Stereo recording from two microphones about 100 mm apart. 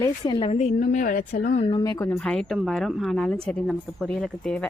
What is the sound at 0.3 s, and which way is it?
Speech, 80° left.